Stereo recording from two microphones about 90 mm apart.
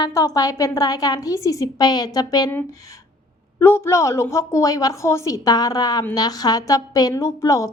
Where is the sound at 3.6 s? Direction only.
30° left (ahead or behind).